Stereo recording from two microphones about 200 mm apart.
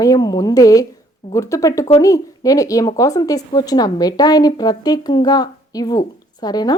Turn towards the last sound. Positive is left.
turn(degrees=20)  # may be behind; listen again after turning